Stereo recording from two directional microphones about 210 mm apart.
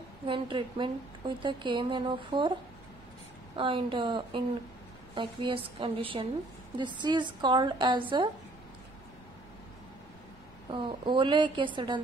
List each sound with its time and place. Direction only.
0.3 s a woman's voice: 20° right (ahead or behind)
3.5 s a woman's voice: 25° right (ahead or behind)
10.7 s a woman's voice: 20° right (ahead or behind)